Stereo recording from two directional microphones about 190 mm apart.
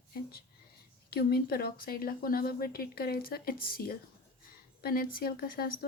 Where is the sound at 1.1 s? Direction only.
55° left (ahead or behind).